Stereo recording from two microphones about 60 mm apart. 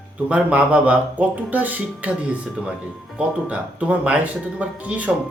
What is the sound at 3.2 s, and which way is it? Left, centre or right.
Speech, right.